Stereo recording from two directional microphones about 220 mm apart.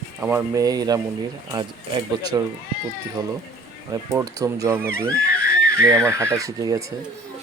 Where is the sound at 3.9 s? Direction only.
15° right (ahead or behind).